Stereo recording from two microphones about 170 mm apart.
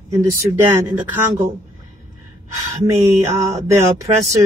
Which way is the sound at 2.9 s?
20° right (ahead or behind).